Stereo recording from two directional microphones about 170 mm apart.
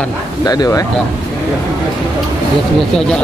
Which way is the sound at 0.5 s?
20° left (ahead or behind).